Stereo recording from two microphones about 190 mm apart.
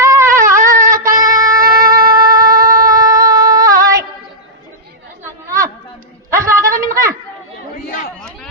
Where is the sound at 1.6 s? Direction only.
50° right (ahead or behind).